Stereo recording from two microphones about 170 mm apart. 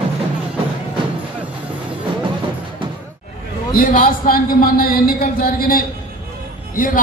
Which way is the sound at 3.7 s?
55° left (ahead or behind).